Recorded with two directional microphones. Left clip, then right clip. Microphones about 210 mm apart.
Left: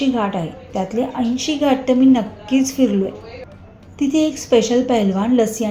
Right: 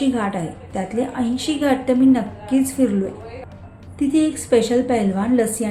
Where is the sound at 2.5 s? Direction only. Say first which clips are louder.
Left 2 dB; 20° right (ahead or behind).